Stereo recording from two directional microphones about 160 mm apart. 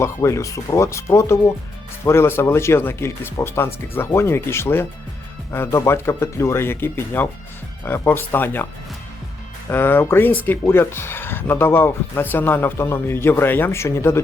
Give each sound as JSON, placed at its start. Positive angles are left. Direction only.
{"t": 0.0, "sound": "speech", "side_deg": 20}
{"t": 9.6, "sound": "speech", "side_deg": 15}